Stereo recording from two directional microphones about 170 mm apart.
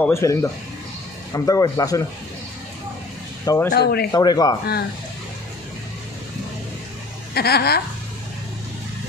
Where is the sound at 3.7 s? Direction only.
70° left (ahead or behind).